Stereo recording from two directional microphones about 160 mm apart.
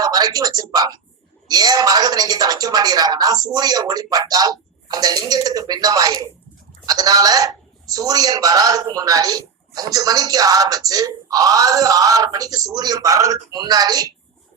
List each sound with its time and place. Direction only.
0.0 s speech: 25° right (ahead or behind)